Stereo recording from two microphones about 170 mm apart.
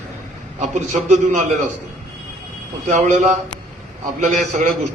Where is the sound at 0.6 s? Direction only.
45° right (ahead or behind).